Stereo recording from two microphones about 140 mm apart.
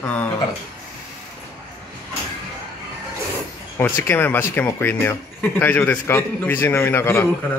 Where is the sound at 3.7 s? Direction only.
15° left (ahead or behind).